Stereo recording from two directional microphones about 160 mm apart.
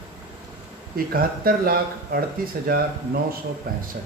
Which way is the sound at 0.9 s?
65° right (ahead or behind).